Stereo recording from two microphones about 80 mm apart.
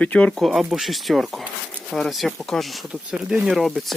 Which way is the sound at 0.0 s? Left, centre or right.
Centre.